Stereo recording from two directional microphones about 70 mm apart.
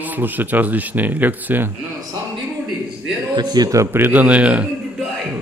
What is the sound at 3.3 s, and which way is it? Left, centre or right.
Speech, right.